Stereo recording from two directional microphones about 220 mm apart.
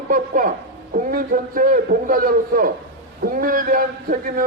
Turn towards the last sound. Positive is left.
turn(degrees=-40)  # may be behind; listen again after turning